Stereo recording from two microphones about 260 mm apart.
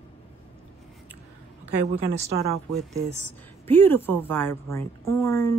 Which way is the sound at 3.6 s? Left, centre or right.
Centre.